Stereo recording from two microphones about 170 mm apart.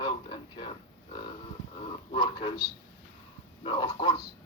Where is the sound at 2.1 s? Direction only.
30° left (ahead or behind).